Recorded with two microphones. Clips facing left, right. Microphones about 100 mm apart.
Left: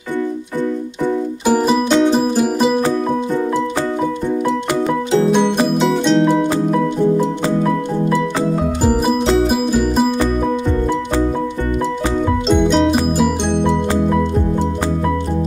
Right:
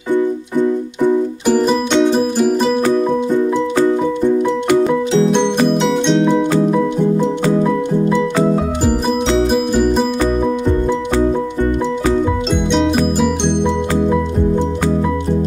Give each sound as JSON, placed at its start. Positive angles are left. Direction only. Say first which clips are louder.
{"t": 1.4, "sound": "music", "louder": "left 3 dB", "side_deg": 5}
{"t": 5.8, "sound": "music", "louder": "even", "side_deg": 0}
{"t": 8.8, "sound": "music", "louder": "left 2 dB", "side_deg": 5}
{"t": 12.4, "sound": "music", "louder": "left 2 dB", "side_deg": 0}